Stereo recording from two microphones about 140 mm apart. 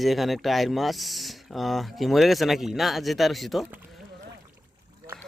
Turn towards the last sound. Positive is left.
turn(degrees=0)  # may be behind; listen again after turning